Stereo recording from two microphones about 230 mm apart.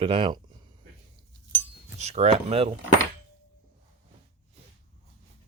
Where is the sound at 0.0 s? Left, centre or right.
Right.